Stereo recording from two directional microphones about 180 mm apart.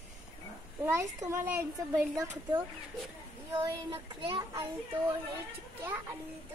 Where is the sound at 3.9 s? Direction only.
30° right (ahead or behind).